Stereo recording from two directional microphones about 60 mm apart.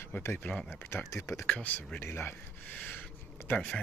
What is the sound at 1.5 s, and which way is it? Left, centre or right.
Speech, left.